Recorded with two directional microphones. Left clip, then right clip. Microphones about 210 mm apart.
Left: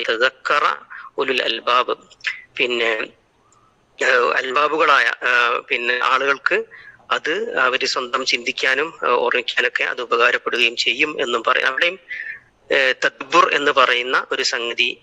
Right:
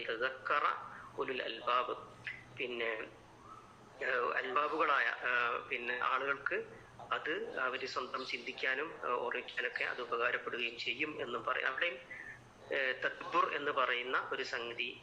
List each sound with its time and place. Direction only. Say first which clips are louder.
0.0 s a man's voice: left 19 dB; 50° left (ahead or behind)